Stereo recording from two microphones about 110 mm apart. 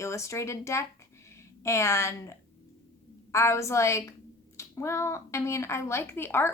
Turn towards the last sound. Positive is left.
turn(degrees=20)  # may be behind; listen again after turning